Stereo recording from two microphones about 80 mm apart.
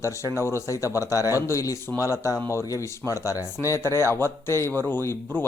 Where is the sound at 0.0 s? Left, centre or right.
Left.